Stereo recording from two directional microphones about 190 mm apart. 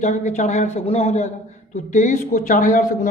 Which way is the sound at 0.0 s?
40° left (ahead or behind).